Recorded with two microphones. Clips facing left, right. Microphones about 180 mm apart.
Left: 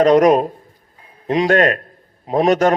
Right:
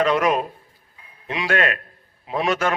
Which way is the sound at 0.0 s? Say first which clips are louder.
Left 8 dB; 40° left (ahead or behind).